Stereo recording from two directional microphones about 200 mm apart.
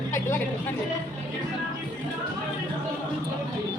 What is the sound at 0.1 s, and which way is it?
Speech, 10° left (ahead or behind).